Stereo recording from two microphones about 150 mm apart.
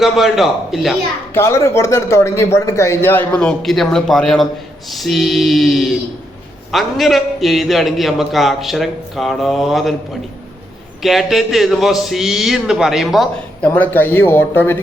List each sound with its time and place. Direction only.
0.0 s a man's voice: centre (ahead or behind)
1.3 s a man's voice: 15° left (ahead or behind); by 9.9 s centre (ahead or behind)
11.0 s a man's voice: centre (ahead or behind)
13.7 s speech: 10° left (ahead or behind)